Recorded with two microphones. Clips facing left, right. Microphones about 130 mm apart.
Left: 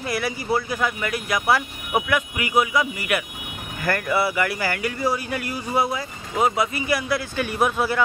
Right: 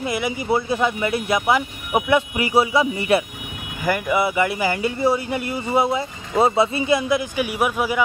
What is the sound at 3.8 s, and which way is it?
Speech, 15° right (ahead or behind).